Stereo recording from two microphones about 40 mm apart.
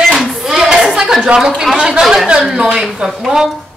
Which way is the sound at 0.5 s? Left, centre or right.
Centre.